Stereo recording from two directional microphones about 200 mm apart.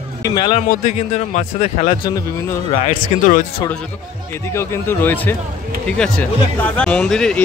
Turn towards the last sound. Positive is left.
turn(degrees=5)  # may be behind; listen again after turning